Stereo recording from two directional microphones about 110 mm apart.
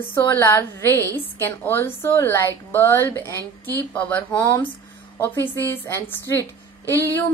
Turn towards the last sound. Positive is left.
turn(degrees=20)  # may be behind; listen again after turning